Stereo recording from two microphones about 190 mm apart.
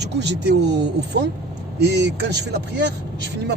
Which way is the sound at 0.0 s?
65° right (ahead or behind).